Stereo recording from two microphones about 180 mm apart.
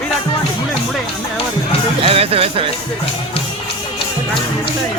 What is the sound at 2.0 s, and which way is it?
Speech, 30° right (ahead or behind).